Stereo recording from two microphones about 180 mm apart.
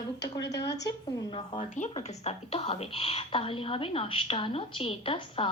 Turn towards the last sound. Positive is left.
turn(degrees=30)  # may be behind; listen again after turning